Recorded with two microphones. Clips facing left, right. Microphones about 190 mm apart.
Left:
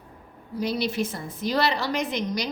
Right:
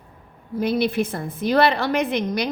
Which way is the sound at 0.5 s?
55° right (ahead or behind).